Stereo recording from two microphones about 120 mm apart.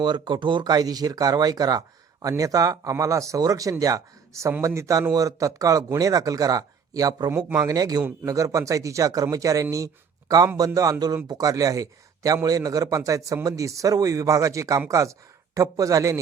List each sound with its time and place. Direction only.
0.0 s speech: 40° right (ahead or behind)